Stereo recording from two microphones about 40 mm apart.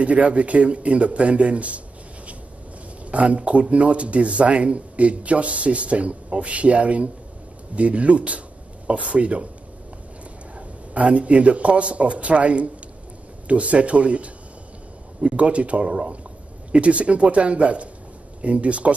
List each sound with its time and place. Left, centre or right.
0.0 s speech: right
3.1 s speech: right
10.9 s speech: right